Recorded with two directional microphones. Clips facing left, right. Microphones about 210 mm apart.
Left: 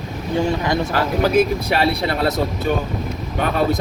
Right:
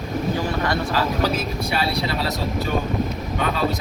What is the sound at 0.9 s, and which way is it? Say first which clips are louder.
Speech: left 6 dB; 60° left (ahead or behind).